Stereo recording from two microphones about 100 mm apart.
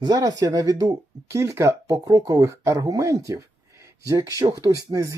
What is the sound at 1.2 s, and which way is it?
Speech, 30° right (ahead or behind).